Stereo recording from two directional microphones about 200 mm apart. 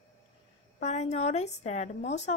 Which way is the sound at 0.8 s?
35° left (ahead or behind).